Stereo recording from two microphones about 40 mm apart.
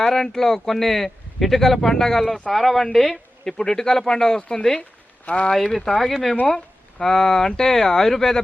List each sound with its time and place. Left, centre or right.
0.0 s a man's voice: centre
4.4 s speech: left
4.8 s a sound: left
5.5 s speech: centre